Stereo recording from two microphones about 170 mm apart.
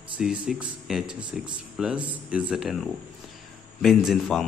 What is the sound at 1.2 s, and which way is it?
Speech, 25° right (ahead or behind).